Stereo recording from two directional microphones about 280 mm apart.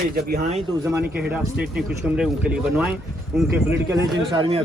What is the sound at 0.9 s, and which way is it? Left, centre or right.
A man's voice, centre.